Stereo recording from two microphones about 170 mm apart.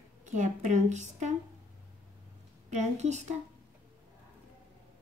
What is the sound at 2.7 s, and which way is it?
Speech, 45° right (ahead or behind).